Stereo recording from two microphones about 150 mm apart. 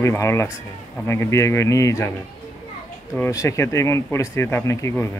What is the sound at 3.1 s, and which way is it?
Speech, 20° left (ahead or behind).